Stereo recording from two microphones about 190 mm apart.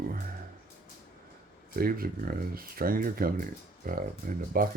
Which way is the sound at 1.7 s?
50° right (ahead or behind).